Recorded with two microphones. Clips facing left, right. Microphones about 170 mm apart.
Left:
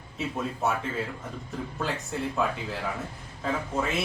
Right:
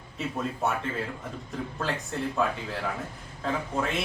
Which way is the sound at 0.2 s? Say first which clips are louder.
Even; centre (ahead or behind).